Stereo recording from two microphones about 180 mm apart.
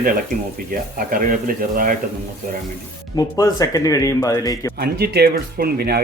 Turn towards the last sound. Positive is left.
turn(degrees=-60)  # may be behind; listen again after turning